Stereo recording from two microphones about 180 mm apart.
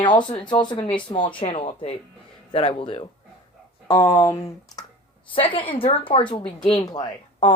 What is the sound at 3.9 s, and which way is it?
Speech, 15° left (ahead or behind).